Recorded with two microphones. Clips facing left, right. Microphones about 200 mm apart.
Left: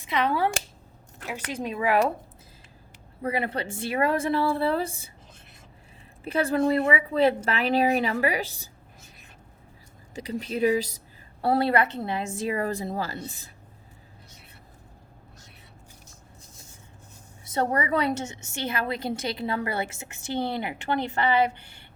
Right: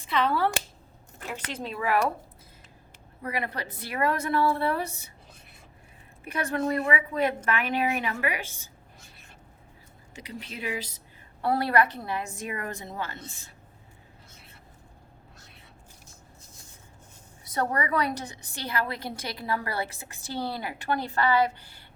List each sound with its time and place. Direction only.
0.0 s speech: 15° left (ahead or behind)
3.2 s a woman's voice: 30° left (ahead or behind)
6.2 s a woman's voice: 30° left (ahead or behind)
10.2 s a woman's voice: 40° left (ahead or behind)
11.4 s a woman's voice: 25° left (ahead or behind)
17.4 s a woman's voice: 25° left (ahead or behind)